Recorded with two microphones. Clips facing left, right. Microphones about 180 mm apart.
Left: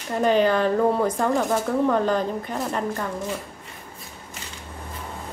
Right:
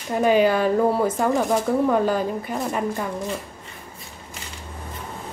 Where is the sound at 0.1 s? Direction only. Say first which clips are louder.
Right 2 dB; 10° right (ahead or behind).